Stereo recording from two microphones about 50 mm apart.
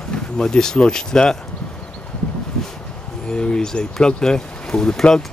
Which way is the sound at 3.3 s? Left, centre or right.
Centre.